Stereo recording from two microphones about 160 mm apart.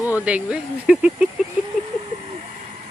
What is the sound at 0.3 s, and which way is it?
Speech, 5° right (ahead or behind).